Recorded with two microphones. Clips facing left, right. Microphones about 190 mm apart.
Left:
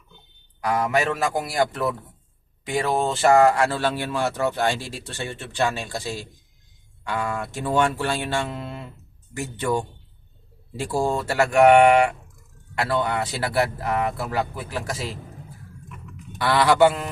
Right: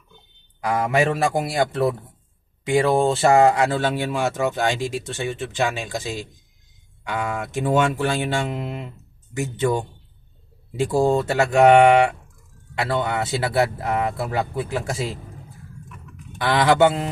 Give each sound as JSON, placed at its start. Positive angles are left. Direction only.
{"t": 0.6, "sound": "speech", "side_deg": -30}
{"t": 7.5, "sound": "speech", "side_deg": -20}
{"t": 16.4, "sound": "speech", "side_deg": -20}